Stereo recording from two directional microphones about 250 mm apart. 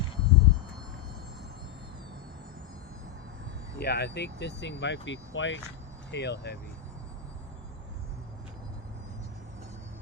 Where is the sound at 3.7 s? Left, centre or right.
Left.